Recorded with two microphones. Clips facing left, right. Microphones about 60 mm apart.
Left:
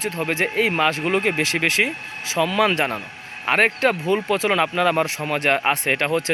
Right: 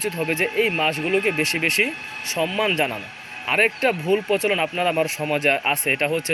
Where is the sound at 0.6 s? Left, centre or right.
Left.